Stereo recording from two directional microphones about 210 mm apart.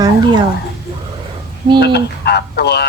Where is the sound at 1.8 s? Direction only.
50° left (ahead or behind).